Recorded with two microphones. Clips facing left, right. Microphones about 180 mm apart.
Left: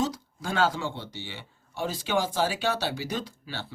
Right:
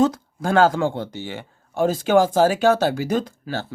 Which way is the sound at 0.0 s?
55° right (ahead or behind).